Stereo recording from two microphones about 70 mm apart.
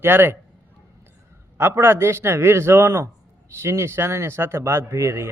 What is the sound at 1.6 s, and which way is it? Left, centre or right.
Speech, right.